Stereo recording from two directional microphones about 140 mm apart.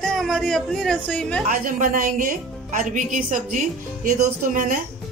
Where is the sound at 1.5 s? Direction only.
80° right.